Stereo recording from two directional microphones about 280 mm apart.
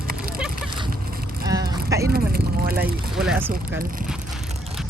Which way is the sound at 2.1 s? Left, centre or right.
Right.